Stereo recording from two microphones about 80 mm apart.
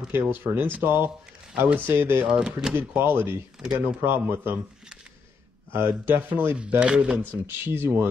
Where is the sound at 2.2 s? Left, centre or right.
Centre.